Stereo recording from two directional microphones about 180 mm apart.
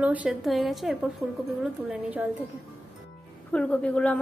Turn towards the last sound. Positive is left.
turn(degrees=5)  # may be behind; listen again after turning